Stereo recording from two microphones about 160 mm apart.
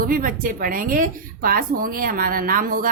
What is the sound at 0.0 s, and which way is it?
A woman's voice, 60° right (ahead or behind).